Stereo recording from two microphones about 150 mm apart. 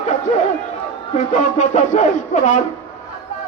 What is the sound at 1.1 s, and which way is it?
A man's voice, 55° left (ahead or behind).